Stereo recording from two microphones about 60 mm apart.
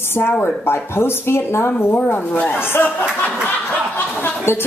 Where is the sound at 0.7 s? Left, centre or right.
Left.